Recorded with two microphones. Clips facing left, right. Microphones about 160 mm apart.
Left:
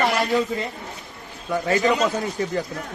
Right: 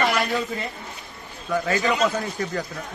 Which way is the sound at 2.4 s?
25° left (ahead or behind).